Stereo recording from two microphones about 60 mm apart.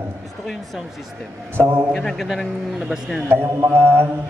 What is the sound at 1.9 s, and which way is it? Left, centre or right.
A man's voice, centre.